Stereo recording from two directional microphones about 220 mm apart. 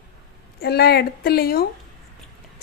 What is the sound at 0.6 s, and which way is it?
A woman's voice, 45° left (ahead or behind).